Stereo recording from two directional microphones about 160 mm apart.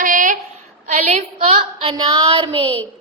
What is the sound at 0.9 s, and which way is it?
Child singing, 45° right (ahead or behind).